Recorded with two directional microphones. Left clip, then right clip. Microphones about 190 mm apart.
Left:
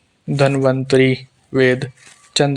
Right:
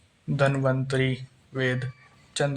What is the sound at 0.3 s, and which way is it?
Speech, 40° left (ahead or behind).